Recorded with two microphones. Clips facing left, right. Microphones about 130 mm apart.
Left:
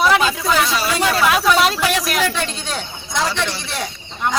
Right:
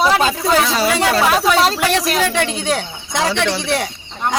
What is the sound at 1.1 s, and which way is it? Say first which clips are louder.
Speech: left 2 dB; 35° right (ahead or behind).